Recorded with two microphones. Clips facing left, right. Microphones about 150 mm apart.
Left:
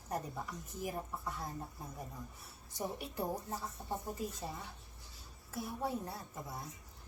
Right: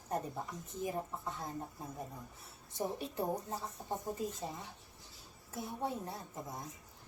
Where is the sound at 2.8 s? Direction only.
25° right (ahead or behind).